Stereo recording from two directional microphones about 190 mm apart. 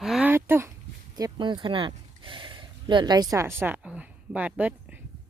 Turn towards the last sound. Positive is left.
turn(degrees=-10)  # may be behind; listen again after turning